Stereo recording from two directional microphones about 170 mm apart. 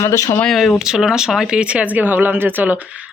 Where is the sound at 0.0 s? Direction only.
20° left (ahead or behind).